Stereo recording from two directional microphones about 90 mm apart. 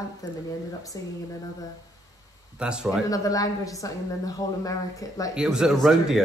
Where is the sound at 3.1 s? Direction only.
40° left (ahead or behind).